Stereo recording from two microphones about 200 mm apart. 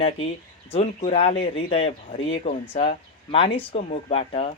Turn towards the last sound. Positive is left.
turn(degrees=30)  # may be behind; listen again after turning